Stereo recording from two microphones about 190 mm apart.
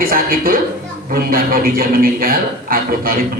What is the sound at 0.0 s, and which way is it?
A man's voice, 50° right (ahead or behind).